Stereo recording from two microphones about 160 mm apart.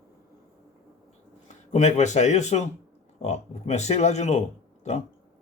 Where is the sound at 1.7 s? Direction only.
45° left (ahead or behind).